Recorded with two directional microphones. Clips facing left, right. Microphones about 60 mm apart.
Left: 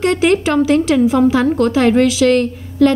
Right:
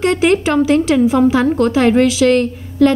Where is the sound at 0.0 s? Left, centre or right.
Right.